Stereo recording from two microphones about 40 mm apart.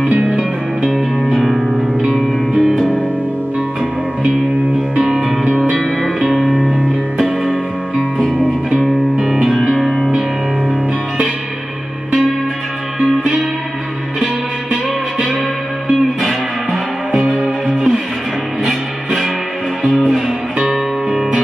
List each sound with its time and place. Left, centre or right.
0.0 s music: right
0.3 s music: centre
6.2 s music: centre
15.9 s music: centre
17.1 s music: right
20.6 s music: centre